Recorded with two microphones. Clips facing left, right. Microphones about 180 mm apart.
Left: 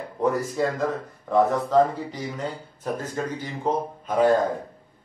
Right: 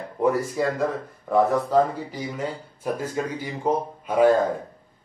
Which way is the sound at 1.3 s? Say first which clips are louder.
Even; 5° right (ahead or behind).